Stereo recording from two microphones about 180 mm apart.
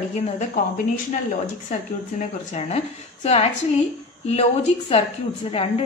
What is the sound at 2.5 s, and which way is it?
Speech, 35° left (ahead or behind).